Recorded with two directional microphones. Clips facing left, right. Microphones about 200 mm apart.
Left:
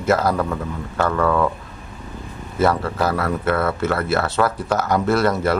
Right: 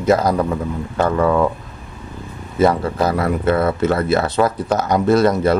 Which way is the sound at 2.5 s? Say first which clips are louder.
Right 3 dB; 15° right (ahead or behind).